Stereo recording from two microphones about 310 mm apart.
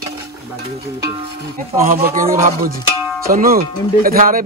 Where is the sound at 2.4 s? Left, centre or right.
Right.